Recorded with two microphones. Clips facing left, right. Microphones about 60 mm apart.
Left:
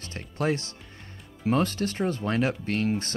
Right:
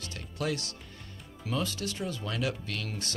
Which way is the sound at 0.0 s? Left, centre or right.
Left.